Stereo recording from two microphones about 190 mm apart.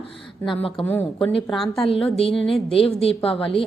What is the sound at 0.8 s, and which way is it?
A woman's voice, 5° left (ahead or behind).